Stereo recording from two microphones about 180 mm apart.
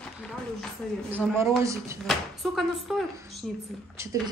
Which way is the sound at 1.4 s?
15° right (ahead or behind).